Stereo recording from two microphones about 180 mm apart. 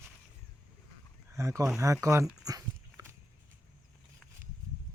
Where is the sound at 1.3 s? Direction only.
15° right (ahead or behind).